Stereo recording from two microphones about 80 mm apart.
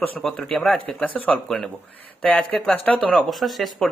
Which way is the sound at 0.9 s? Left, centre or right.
Centre.